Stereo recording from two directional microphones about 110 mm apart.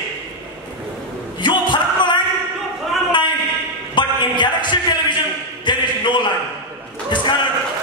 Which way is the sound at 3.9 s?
45° left (ahead or behind).